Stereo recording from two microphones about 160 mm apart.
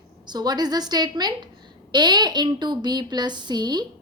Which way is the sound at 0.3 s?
25° right (ahead or behind).